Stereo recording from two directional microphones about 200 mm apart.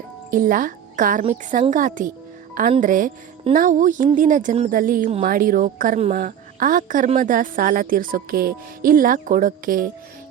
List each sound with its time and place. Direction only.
0.3 s a woman's voice: 40° right (ahead or behind)